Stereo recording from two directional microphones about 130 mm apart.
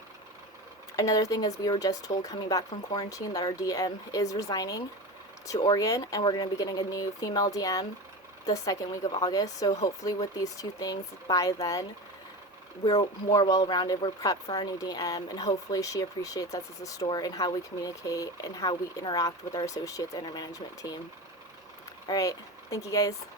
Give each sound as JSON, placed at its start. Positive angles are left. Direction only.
{"t": 0.9, "sound": "speech", "side_deg": 30}
{"t": 13.3, "sound": "speech", "side_deg": 30}
{"t": 22.0, "sound": "speech", "side_deg": 30}